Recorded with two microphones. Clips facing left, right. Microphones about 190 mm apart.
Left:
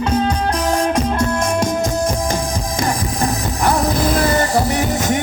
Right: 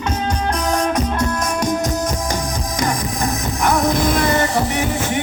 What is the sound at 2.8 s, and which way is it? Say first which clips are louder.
Music: left 1 dB; 30° left (ahead or behind).